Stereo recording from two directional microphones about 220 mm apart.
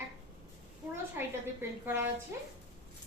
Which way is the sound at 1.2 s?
10° right (ahead or behind).